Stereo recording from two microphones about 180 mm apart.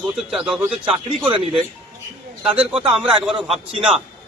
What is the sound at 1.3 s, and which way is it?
Speech, 30° right (ahead or behind).